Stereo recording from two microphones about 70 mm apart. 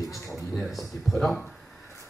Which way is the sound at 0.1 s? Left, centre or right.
Centre.